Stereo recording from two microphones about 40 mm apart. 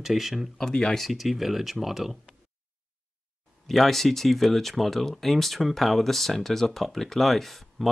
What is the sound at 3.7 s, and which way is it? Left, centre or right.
Speech, centre.